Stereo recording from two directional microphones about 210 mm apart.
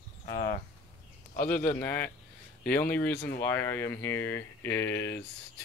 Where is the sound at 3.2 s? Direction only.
45° left (ahead or behind).